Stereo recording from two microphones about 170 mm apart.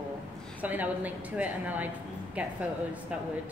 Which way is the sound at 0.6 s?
10° right (ahead or behind).